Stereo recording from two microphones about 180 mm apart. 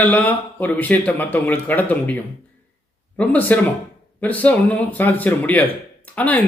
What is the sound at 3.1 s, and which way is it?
Speech, 10° left (ahead or behind).